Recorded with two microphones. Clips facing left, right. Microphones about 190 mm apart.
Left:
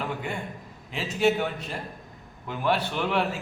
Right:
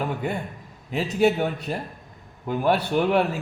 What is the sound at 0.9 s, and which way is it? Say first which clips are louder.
A man's voice: right 3 dB; 40° right (ahead or behind).